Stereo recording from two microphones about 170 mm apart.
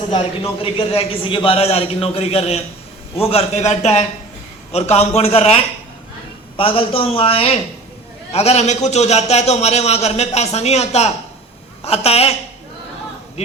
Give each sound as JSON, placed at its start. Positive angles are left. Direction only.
{"t": 0.1, "sound": "a man's voice", "side_deg": 35}